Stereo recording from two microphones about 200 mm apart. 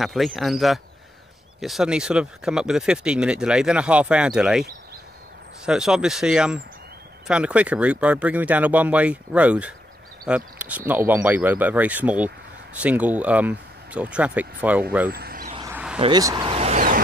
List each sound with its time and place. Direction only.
0.0 s speech: centre (ahead or behind)
5.7 s speech: 5° right (ahead or behind)
15.0 s vehicle: 50° right (ahead or behind)
15.7 s a sound: 5° right (ahead or behind)
16.0 s vehicle: 20° right (ahead or behind)